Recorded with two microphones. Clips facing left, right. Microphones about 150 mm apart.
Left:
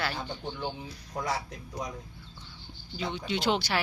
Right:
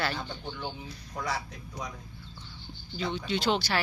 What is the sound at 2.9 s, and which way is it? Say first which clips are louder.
Speech: right 1 dB; 15° left (ahead or behind).